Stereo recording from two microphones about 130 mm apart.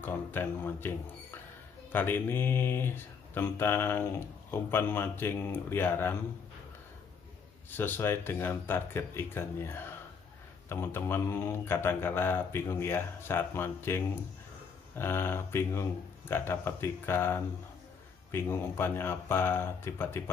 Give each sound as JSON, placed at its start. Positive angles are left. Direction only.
{"t": 0.0, "sound": "speech", "side_deg": 15}
{"t": 7.7, "sound": "speech", "side_deg": 15}